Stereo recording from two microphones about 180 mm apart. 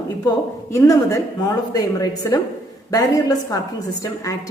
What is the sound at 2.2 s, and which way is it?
A woman's voice, 15° left (ahead or behind).